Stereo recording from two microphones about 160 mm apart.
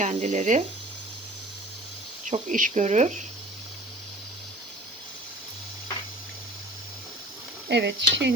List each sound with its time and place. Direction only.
0.0 s speech: 50° right (ahead or behind)
2.2 s speech: 50° right (ahead or behind)
7.7 s speech: 90° right